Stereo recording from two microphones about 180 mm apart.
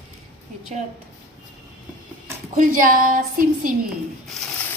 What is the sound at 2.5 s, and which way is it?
A woman's voice, 50° right (ahead or behind).